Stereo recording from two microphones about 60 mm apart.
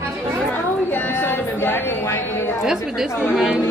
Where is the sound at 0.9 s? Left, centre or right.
Left.